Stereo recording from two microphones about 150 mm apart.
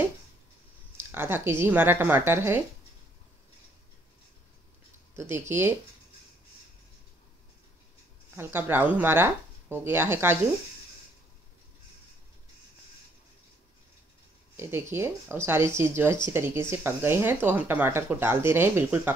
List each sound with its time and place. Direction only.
0.9 s speech: 15° right (ahead or behind)
5.1 s speech: 15° right (ahead or behind)
8.4 s speech: 15° right (ahead or behind)
14.6 s speech: 15° right (ahead or behind)